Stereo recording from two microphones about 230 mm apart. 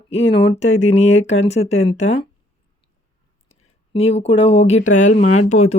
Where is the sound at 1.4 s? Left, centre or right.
Left.